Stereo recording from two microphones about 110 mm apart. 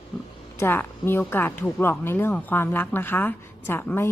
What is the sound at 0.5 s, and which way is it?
A woman's voice, 20° left (ahead or behind).